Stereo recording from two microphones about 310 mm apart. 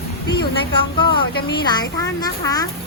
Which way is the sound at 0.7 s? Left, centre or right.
Centre.